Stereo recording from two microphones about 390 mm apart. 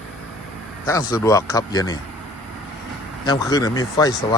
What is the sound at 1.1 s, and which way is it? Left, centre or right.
Speech, centre.